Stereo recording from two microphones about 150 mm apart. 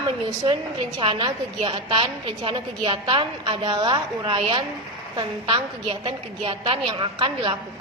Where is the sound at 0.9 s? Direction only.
30° right (ahead or behind).